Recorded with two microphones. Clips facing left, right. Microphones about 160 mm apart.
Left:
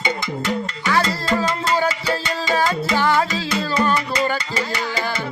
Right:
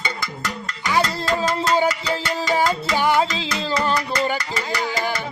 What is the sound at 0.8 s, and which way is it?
Music, 15° right (ahead or behind).